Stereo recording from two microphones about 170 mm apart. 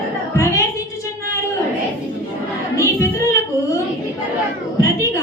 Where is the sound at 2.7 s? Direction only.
15° left (ahead or behind).